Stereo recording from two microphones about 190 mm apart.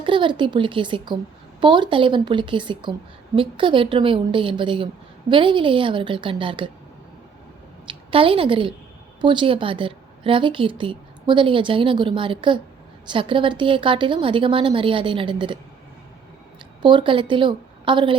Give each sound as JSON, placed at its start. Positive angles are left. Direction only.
{"t": 0.0, "sound": "a woman's voice", "side_deg": -25}
{"t": 7.9, "sound": "a woman's voice", "side_deg": -30}
{"t": 16.8, "sound": "a woman's voice", "side_deg": -25}